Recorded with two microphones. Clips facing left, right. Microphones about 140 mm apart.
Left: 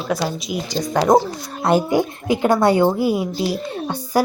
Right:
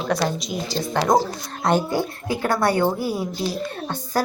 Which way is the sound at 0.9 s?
20° left (ahead or behind).